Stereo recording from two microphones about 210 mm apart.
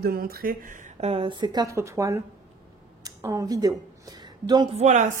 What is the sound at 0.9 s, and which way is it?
Speech, 30° right (ahead or behind).